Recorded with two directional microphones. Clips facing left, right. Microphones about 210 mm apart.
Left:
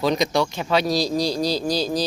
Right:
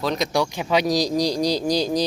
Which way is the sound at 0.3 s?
10° right (ahead or behind).